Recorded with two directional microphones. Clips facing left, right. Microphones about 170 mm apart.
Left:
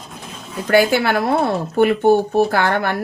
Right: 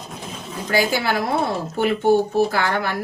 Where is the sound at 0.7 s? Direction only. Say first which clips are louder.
Left 6 dB; 60° left (ahead or behind).